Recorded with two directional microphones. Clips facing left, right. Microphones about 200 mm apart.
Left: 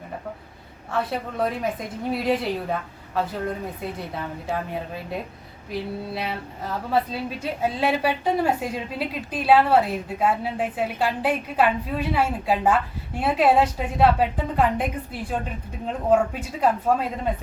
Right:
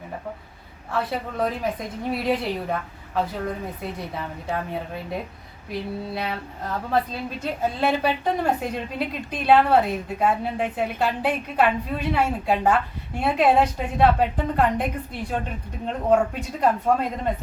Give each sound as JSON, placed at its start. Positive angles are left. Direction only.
{"t": 0.9, "sound": "a woman's voice", "side_deg": 0}